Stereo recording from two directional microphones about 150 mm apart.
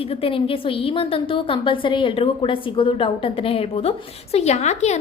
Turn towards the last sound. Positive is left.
turn(degrees=50)  # may be behind; listen again after turning